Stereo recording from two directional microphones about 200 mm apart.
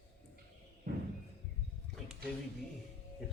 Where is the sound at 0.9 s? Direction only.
50° right (ahead or behind).